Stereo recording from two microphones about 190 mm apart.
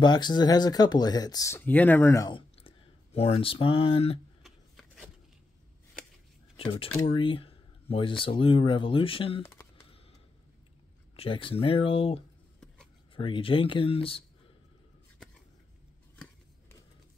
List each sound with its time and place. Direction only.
0.0 s speech: 20° left (ahead or behind)
2.3 s speech: 30° left (ahead or behind)
4.4 s shuffling cards: centre (ahead or behind)
6.5 s speech: 30° left (ahead or behind)
11.1 s speech: 25° left (ahead or behind)